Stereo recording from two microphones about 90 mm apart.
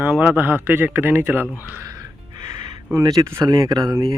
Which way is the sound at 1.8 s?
40° right (ahead or behind).